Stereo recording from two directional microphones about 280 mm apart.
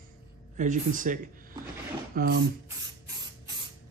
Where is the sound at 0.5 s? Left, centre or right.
Right.